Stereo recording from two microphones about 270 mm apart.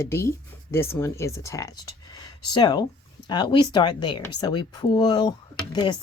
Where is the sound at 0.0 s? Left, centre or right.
Centre.